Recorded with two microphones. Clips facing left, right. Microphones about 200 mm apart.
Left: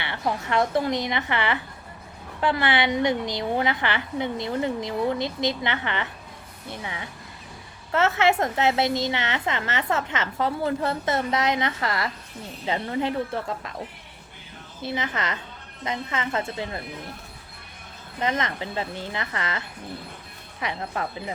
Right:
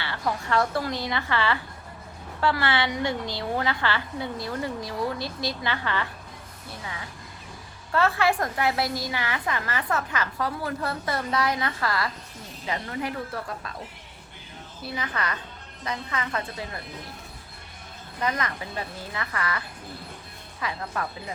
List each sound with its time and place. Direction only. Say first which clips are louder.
0.0 s a woman's voice: left 2 dB; 20° left (ahead or behind)
14.8 s a woman's voice: left 3 dB; 25° left (ahead or behind)
18.2 s a woman's voice: left 2 dB; 25° left (ahead or behind)